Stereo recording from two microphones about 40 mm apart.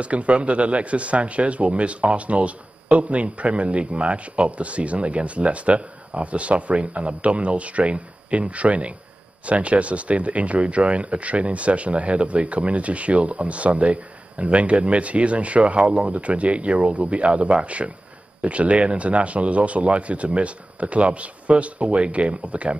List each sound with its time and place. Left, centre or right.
0.0 s speech: right